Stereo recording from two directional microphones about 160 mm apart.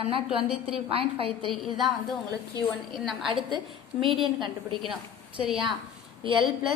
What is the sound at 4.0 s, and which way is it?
Speech, 30° right (ahead or behind).